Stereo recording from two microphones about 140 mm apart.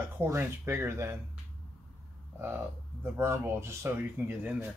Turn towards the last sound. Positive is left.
turn(degrees=-10)  # may be behind; listen again after turning